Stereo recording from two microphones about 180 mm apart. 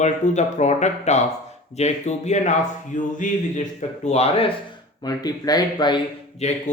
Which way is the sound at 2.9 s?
45° left (ahead or behind).